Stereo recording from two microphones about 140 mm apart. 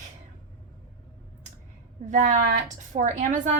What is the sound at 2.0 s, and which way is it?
Speech, 60° right (ahead or behind).